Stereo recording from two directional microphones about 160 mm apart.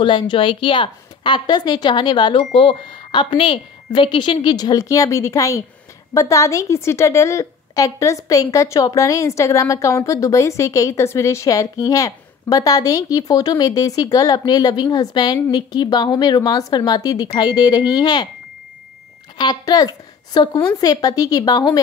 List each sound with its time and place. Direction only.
0.0 s a woman's voice: 30° left (ahead or behind)
19.3 s a woman's voice: 25° left (ahead or behind)